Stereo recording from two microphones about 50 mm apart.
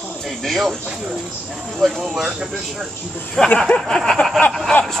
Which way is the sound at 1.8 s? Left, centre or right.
Centre.